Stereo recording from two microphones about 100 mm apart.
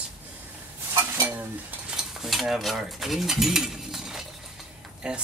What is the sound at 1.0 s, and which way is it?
Stir, 20° right (ahead or behind).